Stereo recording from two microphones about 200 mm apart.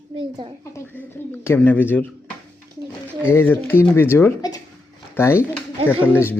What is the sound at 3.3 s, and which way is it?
A child's voice, 10° left (ahead or behind).